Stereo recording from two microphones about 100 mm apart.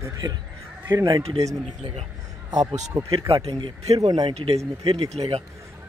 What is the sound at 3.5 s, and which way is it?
Speech, 60° right (ahead or behind).